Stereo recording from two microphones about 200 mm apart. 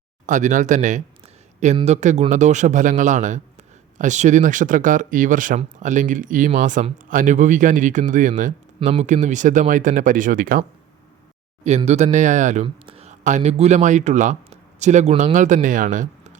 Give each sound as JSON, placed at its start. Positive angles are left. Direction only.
{"t": 0.3, "sound": "speech", "side_deg": -40}
{"t": 11.8, "sound": "speech", "side_deg": -35}